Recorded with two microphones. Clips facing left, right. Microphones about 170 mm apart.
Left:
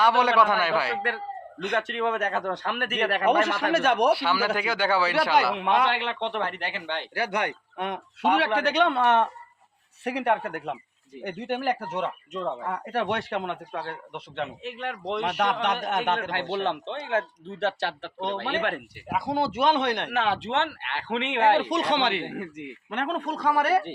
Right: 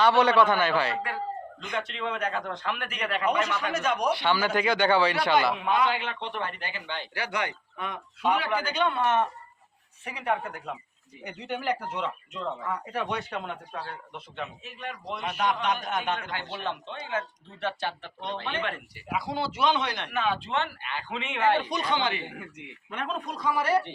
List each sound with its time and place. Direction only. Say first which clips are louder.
0.0 s a man's voice: even; 10° left (ahead or behind)
1.0 s speech: left 1 dB; 70° left (ahead or behind)
1.9 s speech: left 5 dB; 50° left (ahead or behind)
4.1 s speech: left 1 dB; 5° left (ahead or behind)
5.5 s speech: left 2 dB; 70° left (ahead or behind)
11.2 s speech: left 5 dB; 55° left (ahead or behind)
12.7 s speech: left 5 dB; 60° left (ahead or behind)
19.0 s speech: left 4 dB; 50° left (ahead or behind)